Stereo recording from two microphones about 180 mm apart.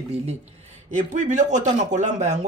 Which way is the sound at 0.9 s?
40° right (ahead or behind).